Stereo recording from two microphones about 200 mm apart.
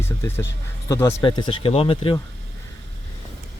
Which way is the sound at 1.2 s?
25° left (ahead or behind).